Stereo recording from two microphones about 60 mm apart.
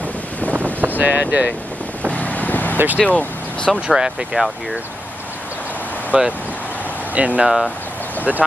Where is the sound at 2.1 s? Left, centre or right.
Left.